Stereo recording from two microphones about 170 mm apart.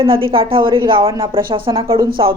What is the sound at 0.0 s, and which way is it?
A woman's voice, 30° right (ahead or behind).